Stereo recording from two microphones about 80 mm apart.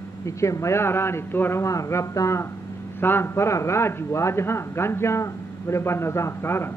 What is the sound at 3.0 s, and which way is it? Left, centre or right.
A man's voice, left.